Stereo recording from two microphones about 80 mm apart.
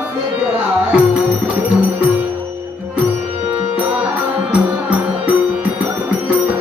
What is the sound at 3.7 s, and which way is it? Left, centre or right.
Music, centre.